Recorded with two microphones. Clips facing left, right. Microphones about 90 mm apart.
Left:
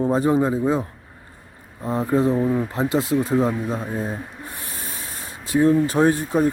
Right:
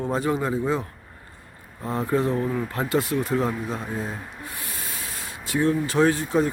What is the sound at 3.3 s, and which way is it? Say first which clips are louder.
Speech: left 4 dB; 5° left (ahead or behind).